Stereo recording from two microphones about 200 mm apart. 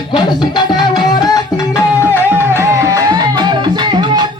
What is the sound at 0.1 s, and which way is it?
Music, 20° left (ahead or behind).